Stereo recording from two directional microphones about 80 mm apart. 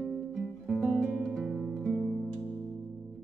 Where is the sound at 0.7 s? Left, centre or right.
Centre.